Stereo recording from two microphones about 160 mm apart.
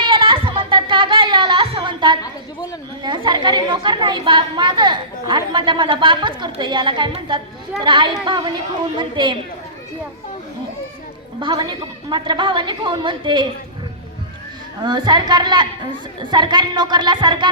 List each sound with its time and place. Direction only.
0.0 s music: 30° right (ahead or behind)
3.0 s a woman's voice: 30° right (ahead or behind)
11.3 s a woman's voice: 30° right (ahead or behind)
14.8 s a woman's voice: 30° right (ahead or behind)